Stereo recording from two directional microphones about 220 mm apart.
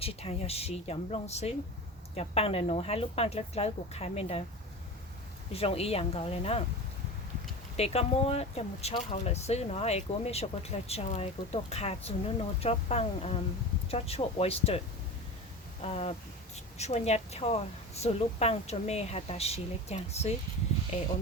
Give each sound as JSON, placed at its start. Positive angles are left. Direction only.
{"t": 0.0, "sound": "a woman's voice", "side_deg": 25}
{"t": 5.5, "sound": "a woman's voice", "side_deg": 25}
{"t": 7.8, "sound": "a woman's voice", "side_deg": 25}
{"t": 15.8, "sound": "a woman's voice", "side_deg": 25}